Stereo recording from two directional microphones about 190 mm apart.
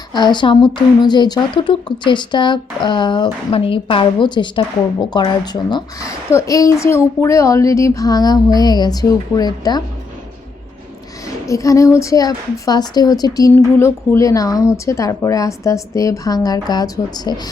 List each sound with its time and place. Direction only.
0.1 s speech: 25° left (ahead or behind)
11.4 s a woman's voice: 15° left (ahead or behind)